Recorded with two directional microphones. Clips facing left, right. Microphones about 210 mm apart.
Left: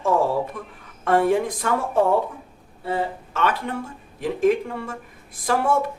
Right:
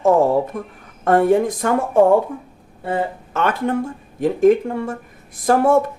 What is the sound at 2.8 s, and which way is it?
Speech, 50° right (ahead or behind).